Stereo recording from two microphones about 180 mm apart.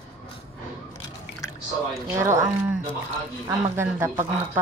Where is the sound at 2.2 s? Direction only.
15° right (ahead or behind).